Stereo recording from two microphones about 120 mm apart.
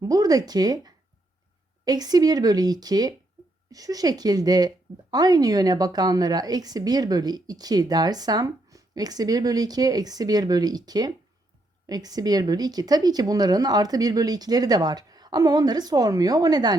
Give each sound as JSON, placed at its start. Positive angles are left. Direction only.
{"t": 0.0, "sound": "a woman's voice", "side_deg": -30}